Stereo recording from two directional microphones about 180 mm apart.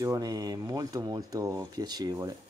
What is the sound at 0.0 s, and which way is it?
Speech, 20° right (ahead or behind).